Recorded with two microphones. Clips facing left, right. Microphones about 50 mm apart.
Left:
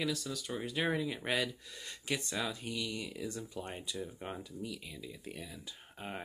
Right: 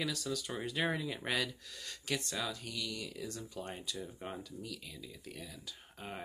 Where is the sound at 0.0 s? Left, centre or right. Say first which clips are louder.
Left 1 dB; centre.